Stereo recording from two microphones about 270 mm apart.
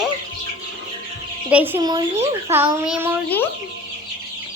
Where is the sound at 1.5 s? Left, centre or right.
Centre.